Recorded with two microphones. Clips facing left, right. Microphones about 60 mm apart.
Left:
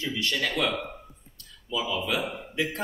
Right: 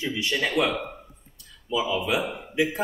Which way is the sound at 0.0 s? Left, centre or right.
Centre.